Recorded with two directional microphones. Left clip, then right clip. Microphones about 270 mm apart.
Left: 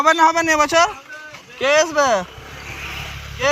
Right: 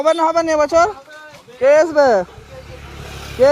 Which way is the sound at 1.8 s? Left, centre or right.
Right.